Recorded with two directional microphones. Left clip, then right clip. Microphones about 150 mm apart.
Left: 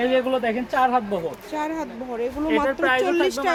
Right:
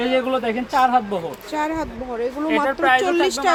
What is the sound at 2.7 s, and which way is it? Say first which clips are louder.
Speech: right 3 dB; 15° left (ahead or behind).